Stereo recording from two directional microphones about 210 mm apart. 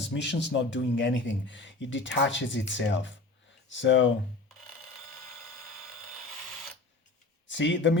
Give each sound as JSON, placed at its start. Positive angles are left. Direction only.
{"t": 0.0, "sound": "a man's voice", "side_deg": 55}
{"t": 7.4, "sound": "speech", "side_deg": 60}